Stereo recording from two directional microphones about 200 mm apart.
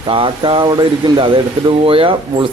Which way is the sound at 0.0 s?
25° right (ahead or behind).